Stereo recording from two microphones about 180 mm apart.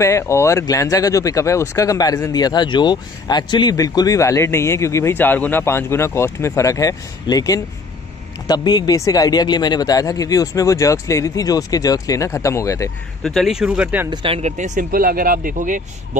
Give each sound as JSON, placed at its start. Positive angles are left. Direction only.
{"t": 0.0, "sound": "a man's voice", "side_deg": 15}
{"t": 13.2, "sound": "speech", "side_deg": 0}
{"t": 14.1, "sound": "speech", "side_deg": -30}